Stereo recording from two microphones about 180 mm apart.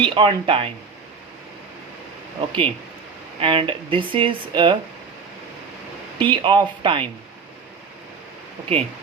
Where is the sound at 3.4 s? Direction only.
30° right (ahead or behind).